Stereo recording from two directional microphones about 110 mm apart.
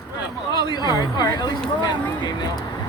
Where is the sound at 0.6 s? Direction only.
40° left (ahead or behind).